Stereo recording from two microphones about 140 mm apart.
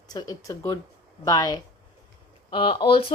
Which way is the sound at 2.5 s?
40° left (ahead or behind).